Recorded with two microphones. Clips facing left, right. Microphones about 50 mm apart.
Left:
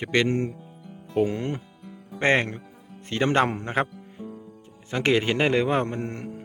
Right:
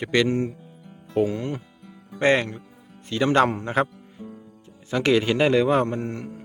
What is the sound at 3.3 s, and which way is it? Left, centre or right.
A man's voice, centre.